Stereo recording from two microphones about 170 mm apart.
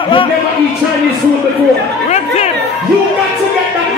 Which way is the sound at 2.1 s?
40° left (ahead or behind).